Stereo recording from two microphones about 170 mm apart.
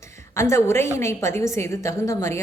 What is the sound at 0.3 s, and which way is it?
A woman's voice, 15° left (ahead or behind).